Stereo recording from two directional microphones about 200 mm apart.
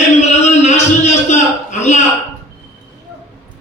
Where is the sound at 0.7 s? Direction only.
35° left (ahead or behind).